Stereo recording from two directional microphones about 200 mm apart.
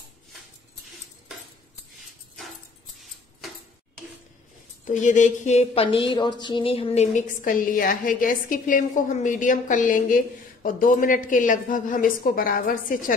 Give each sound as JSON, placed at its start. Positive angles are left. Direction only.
{"t": 4.8, "sound": "speech", "side_deg": 40}